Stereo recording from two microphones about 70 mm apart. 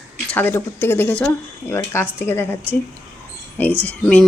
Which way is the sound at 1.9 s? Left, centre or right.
Left.